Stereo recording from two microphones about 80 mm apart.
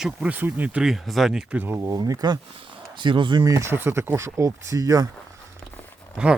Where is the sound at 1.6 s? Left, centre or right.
Right.